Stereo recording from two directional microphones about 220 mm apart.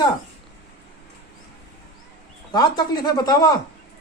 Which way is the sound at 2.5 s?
20° left (ahead or behind).